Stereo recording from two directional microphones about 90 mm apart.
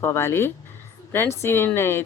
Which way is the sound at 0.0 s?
30° left (ahead or behind).